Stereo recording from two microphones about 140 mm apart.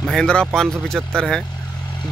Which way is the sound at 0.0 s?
5° left (ahead or behind).